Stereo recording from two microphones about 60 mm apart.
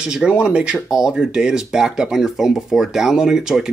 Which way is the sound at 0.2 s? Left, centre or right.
Centre.